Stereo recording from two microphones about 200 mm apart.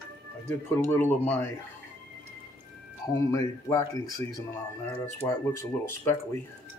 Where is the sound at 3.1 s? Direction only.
15° left (ahead or behind).